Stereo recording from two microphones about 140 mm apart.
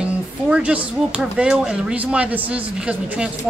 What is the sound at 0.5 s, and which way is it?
Speech, 10° right (ahead or behind).